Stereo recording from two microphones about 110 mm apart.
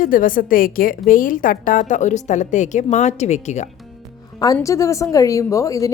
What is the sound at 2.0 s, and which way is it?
A woman's voice, 90° left.